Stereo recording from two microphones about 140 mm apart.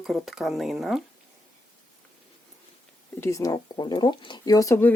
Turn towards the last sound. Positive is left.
turn(degrees=20)  # may be behind; listen again after turning